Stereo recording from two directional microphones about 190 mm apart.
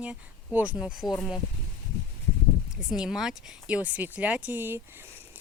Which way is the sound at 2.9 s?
5° right (ahead or behind).